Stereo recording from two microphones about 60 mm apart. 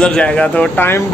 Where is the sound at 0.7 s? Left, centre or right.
Left.